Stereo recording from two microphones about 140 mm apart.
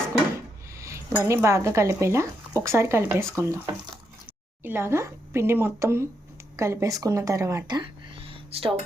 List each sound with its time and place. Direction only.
0.8 s speech: 20° right (ahead or behind)
4.6 s speech: 15° right (ahead or behind); by 8.7 s 40° right (ahead or behind)